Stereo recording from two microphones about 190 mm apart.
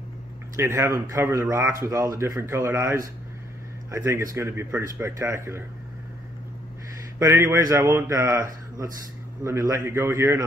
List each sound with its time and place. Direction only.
0.6 s a man's voice: 15° right (ahead or behind)
7.2 s a man's voice: 15° right (ahead or behind)